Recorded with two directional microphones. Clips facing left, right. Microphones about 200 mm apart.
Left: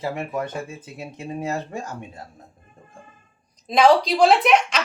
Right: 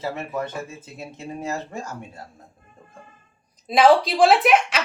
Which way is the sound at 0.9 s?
15° left (ahead or behind).